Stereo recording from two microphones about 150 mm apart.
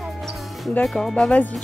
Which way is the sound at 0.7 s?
5° left (ahead or behind).